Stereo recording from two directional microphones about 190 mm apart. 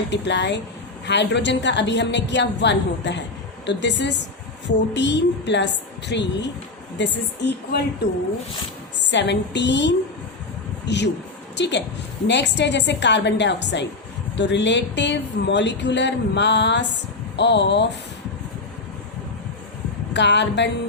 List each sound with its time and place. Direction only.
0.1 s a woman's voice: 65° left (ahead or behind)
9.0 s a woman's voice: 65° left (ahead or behind)
20.1 s speech: 65° left (ahead or behind)